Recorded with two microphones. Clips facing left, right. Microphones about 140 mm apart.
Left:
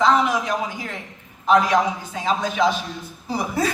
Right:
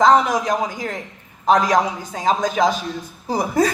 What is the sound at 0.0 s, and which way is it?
A man's voice, 40° right (ahead or behind).